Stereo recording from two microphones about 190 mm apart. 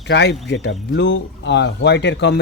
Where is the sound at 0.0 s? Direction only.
65° left (ahead or behind).